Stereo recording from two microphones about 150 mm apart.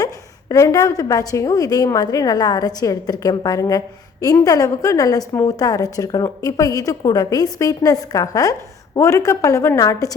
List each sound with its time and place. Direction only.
0.0 s a woman's voice: 20° left (ahead or behind)